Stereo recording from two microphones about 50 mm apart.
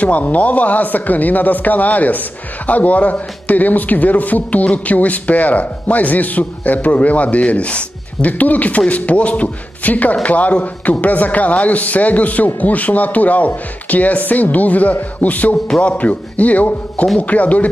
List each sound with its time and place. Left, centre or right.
0.0 s a man's voice: left